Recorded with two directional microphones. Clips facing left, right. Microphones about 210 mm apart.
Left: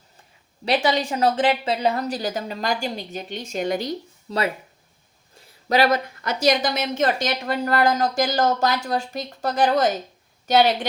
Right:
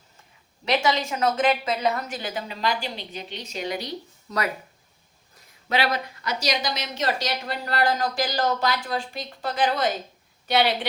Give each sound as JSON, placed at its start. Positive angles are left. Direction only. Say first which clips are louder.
{"t": 0.6, "sound": "a woman's voice", "louder": "left 2 dB", "side_deg": 35}
{"t": 4.3, "sound": "speech", "louder": "left 3 dB", "side_deg": 30}
{"t": 5.6, "sound": "a woman's voice", "louder": "left 6 dB", "side_deg": 40}